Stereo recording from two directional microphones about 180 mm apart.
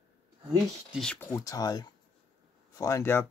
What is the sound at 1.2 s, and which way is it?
Speech, 20° left (ahead or behind).